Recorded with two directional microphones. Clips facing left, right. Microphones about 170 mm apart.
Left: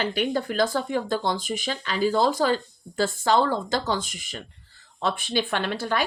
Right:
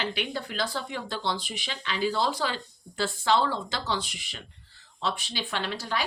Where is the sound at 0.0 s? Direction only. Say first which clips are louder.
Left 7 dB; 45° left (ahead or behind).